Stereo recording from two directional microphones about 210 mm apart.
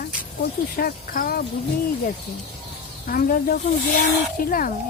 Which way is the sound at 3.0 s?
45° left (ahead or behind).